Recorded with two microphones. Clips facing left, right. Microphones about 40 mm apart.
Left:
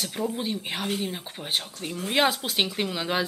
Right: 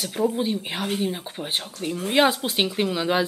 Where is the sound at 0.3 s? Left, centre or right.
Centre.